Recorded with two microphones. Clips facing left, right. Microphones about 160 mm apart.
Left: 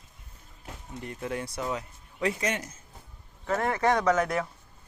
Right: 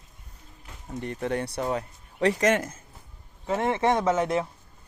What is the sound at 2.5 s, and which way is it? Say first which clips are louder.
Speech: right 9 dB; 55° right (ahead or behind).